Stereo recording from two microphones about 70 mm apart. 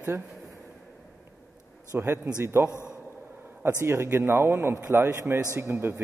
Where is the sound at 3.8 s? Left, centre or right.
Right.